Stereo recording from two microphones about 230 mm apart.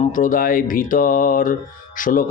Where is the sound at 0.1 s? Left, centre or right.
Left.